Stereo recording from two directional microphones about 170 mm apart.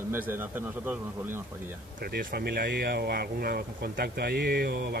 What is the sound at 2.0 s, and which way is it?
Speech, 65° right (ahead or behind).